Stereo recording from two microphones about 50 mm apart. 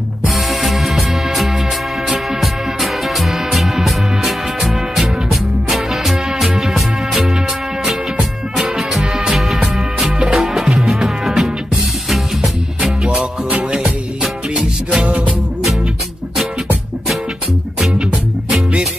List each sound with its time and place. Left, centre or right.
0.3 s music: centre
13.7 s music: centre
17.9 s music: right